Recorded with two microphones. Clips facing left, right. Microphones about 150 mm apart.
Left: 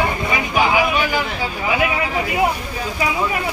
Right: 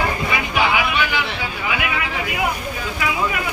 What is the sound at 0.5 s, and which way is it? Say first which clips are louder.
Speech: left 3 dB; 40° left (ahead or behind).